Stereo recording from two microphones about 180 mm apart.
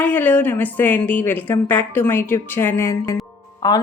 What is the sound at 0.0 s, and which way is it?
A woman's voice, 10° left (ahead or behind).